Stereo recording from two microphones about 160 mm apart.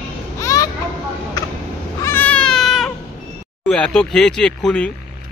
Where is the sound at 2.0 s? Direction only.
10° left (ahead or behind).